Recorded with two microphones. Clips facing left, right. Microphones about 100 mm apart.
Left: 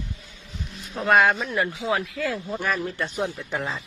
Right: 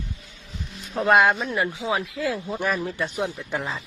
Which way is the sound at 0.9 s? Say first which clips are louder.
Right 1 dB; 20° right (ahead or behind).